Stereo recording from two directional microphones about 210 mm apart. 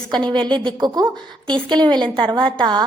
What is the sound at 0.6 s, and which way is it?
A woman's voice, 20° right (ahead or behind).